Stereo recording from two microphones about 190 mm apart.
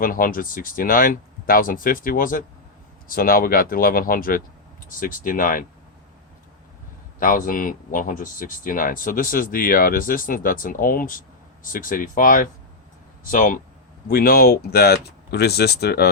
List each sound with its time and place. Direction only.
0.0 s speech: 45° left (ahead or behind)
7.2 s speech: 45° left (ahead or behind)